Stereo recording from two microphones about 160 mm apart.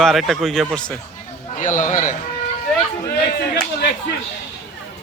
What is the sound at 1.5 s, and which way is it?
Speech, 55° left (ahead or behind).